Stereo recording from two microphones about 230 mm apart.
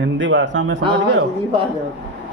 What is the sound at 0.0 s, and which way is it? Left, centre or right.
Speech, right.